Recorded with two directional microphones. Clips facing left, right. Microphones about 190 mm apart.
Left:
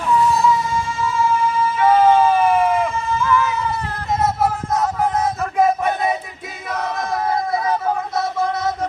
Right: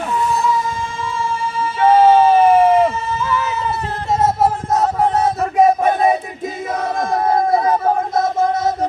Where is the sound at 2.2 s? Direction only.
25° right (ahead or behind).